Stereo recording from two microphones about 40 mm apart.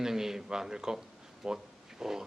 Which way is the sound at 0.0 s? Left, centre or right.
Centre.